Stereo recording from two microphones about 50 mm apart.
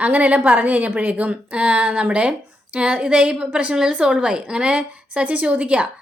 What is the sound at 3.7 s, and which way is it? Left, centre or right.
A woman's voice, centre.